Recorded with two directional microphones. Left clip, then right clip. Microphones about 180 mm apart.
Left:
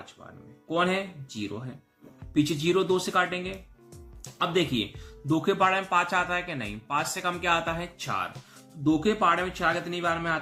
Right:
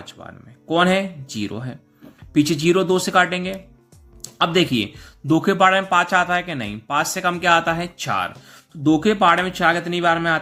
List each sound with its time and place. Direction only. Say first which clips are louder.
0.7 s speech: right 9 dB; 45° right (ahead or behind)